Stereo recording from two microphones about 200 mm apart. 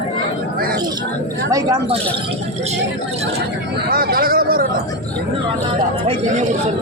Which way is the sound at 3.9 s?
50° right (ahead or behind).